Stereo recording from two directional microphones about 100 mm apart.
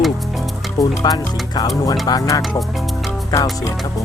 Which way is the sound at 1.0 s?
40° left (ahead or behind).